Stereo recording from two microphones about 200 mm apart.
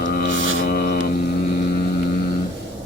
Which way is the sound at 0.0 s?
45° left (ahead or behind).